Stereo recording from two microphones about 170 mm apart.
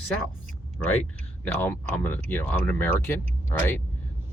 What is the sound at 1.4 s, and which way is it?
Speech, 10° left (ahead or behind).